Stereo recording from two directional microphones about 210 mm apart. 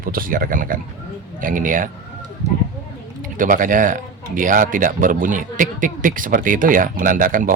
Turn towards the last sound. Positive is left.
turn(degrees=-40)  # may be behind; listen again after turning